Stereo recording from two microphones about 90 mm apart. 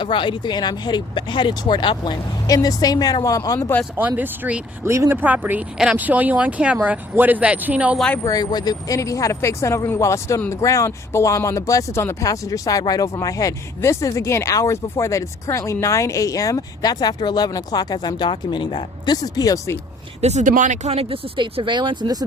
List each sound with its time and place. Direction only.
0.0 s speech: 60° left (ahead or behind)
2.5 s speech: 45° left (ahead or behind)
3.9 s speech: 20° right (ahead or behind)
4.9 s speech: 30° right (ahead or behind)
5.1 s speech: 20° right (ahead or behind)
5.7 s a man's voice: 5° right (ahead or behind)
6.0 s a man's voice: 20° right (ahead or behind)
7.9 s speech: 10° left (ahead or behind)
8.2 s speech: 45° left (ahead or behind)
20.9 s speech: 90° right; by 22.2 s 50° right (ahead or behind)